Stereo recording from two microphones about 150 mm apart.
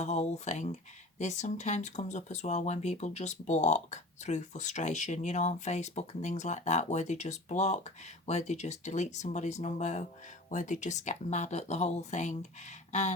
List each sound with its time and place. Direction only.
0.0 s speech: 50° left (ahead or behind)